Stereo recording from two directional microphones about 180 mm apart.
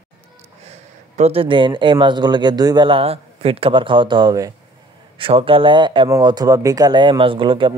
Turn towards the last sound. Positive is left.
turn(degrees=-30)  # may be behind; listen again after turning